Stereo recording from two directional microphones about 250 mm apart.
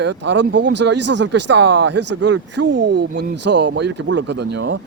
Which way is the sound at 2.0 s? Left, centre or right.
Right.